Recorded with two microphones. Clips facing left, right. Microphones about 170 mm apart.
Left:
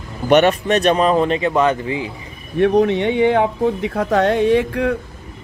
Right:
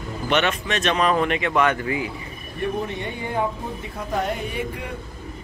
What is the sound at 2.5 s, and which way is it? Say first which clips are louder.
Speech: left 12 dB; 80° left.